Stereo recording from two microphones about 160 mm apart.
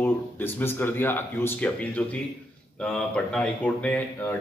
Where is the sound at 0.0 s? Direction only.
15° left (ahead or behind).